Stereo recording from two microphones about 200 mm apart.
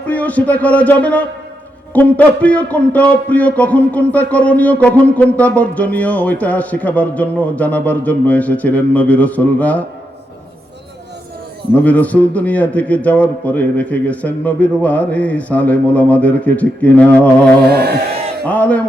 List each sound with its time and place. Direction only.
0.0 s a man's voice: 10° left (ahead or behind)
11.7 s a man's voice: 5° left (ahead or behind)
17.7 s speech: 55° right (ahead or behind)
18.4 s a man's voice: 10° left (ahead or behind)